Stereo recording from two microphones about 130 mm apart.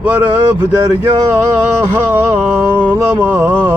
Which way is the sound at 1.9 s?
20° right (ahead or behind).